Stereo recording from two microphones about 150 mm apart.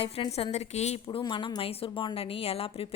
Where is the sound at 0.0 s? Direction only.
40° left (ahead or behind).